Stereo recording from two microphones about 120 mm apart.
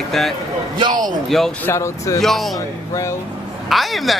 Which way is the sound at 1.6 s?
25° left (ahead or behind).